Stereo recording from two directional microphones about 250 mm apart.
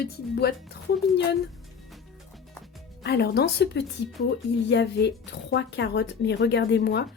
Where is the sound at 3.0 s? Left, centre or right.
Left.